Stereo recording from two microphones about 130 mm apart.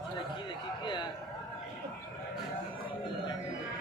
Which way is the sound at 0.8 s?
35° left (ahead or behind).